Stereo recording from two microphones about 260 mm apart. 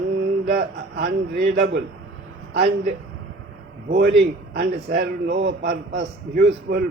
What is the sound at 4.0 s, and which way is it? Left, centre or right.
A man's voice, right.